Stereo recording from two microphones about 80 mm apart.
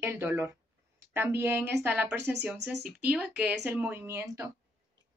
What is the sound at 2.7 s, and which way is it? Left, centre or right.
A woman's voice, centre.